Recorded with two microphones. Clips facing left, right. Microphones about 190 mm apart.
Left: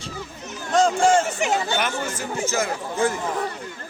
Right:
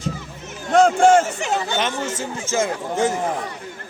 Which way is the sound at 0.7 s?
60° right (ahead or behind).